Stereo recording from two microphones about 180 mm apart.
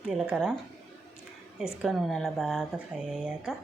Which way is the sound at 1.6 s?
5° right (ahead or behind).